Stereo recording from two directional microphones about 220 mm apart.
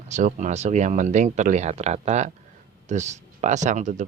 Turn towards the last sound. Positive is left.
turn(degrees=-35)  # may be behind; listen again after turning